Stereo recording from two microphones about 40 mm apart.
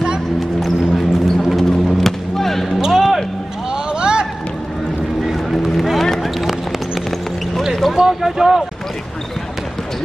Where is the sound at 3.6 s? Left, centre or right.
Right.